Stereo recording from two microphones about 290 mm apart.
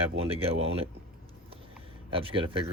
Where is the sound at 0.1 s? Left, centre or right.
Right.